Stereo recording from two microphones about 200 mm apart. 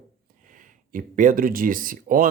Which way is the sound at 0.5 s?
40° right (ahead or behind).